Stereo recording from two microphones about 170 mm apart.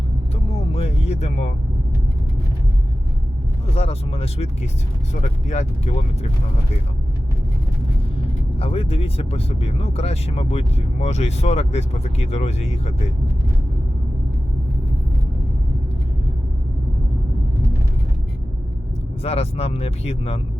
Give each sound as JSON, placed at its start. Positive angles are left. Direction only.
{"t": 0.7, "sound": "a sound", "side_deg": 35}
{"t": 3.7, "sound": "speech", "side_deg": 35}
{"t": 8.5, "sound": "speech", "side_deg": 35}
{"t": 19.2, "sound": "speech", "side_deg": 35}